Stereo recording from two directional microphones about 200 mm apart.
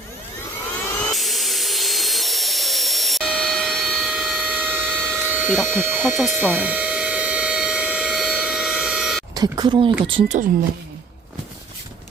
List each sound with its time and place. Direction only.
0.9 s vacuum cleaner: centre (ahead or behind)
9.3 s speech: 20° right (ahead or behind)